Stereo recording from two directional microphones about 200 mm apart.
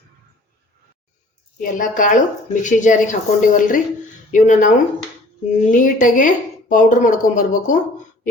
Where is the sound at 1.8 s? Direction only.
40° left (ahead or behind).